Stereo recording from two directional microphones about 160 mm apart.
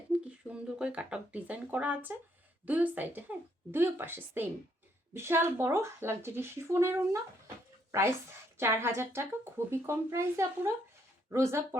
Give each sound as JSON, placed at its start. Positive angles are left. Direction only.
{"t": 0.1, "sound": "speech", "side_deg": -10}
{"t": 8.5, "sound": "speech", "side_deg": -15}